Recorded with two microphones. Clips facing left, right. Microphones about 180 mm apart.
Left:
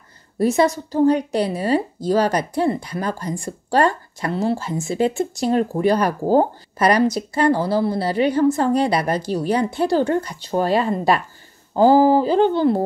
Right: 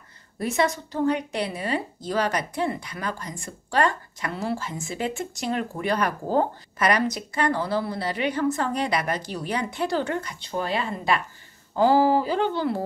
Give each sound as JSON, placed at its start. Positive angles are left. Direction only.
{"t": 0.4, "sound": "a woman's voice", "side_deg": 35}